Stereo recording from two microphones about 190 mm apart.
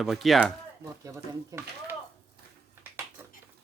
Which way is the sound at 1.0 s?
20° right (ahead or behind).